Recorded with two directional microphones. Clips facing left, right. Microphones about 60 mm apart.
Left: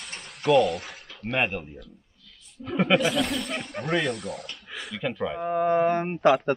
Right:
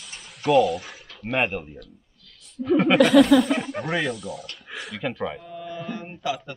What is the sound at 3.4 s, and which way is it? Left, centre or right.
Speech, centre.